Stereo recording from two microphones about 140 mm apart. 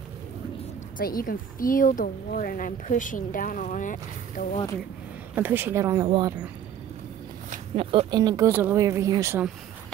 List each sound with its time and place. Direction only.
0.9 s speech: 90° left; by 4.6 s 65° left (ahead or behind)
5.3 s speech: 15° right (ahead or behind)
7.7 s speech: 40° right (ahead or behind); by 9.4 s 25° right (ahead or behind)